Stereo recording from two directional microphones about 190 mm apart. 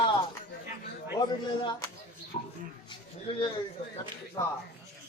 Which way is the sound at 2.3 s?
40° left (ahead or behind).